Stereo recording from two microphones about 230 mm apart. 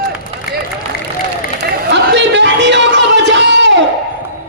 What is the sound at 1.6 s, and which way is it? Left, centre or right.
Chatter, right.